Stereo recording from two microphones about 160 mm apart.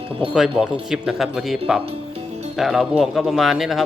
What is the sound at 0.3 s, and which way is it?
Speech, 5° right (ahead or behind).